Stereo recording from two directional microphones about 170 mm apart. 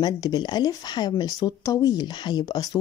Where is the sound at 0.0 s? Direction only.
25° left (ahead or behind).